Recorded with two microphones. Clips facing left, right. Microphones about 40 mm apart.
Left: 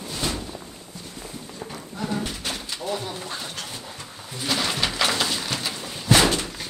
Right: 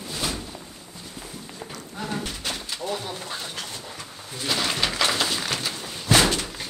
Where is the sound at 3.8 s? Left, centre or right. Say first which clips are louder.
Even; centre.